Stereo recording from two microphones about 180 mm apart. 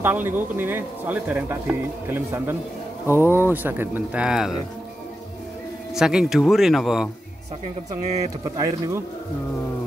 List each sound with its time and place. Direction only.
0.0 s speech: 10° right (ahead or behind)
5.9 s speech: 5° right (ahead or behind)
8.5 s speech: 15° right (ahead or behind)